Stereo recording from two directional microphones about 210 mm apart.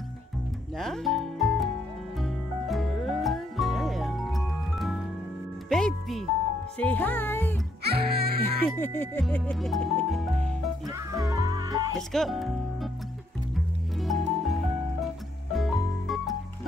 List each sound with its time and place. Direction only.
0.7 s music: centre (ahead or behind)
6.8 s speech: 5° left (ahead or behind)
7.8 s music: 50° right (ahead or behind)
8.7 s music: 10° left (ahead or behind)
10.9 s speech: 15° right (ahead or behind)
12.1 s speech: centre (ahead or behind)
13.9 s music: centre (ahead or behind)